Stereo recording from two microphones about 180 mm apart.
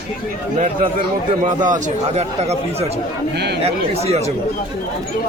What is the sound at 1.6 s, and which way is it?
Speech, 40° right (ahead or behind).